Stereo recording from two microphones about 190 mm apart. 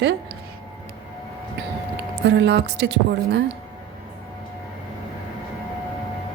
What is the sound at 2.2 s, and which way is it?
Speech, 65° right (ahead or behind).